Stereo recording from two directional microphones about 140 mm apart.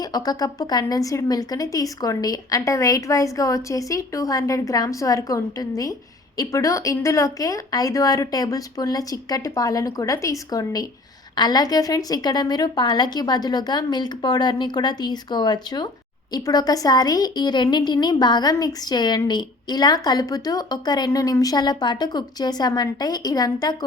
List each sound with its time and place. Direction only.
0.0 s a woman's voice: 30° left (ahead or behind)